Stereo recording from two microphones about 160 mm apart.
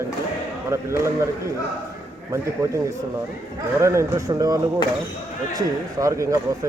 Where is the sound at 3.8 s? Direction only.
20° right (ahead or behind).